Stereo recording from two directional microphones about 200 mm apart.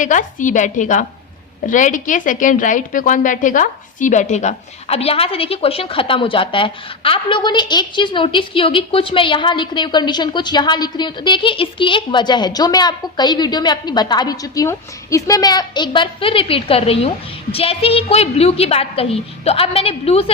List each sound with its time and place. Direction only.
0.0 s a woman's voice: 40° left (ahead or behind)